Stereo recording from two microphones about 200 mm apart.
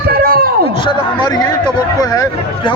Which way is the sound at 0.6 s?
25° left (ahead or behind).